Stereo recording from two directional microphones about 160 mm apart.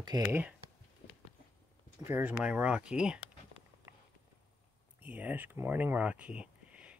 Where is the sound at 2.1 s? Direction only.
10° right (ahead or behind).